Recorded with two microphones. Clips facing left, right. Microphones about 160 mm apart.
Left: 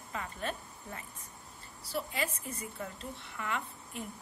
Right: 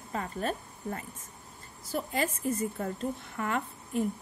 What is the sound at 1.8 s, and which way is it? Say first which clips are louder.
A woman's voice: right 5 dB; 45° right (ahead or behind).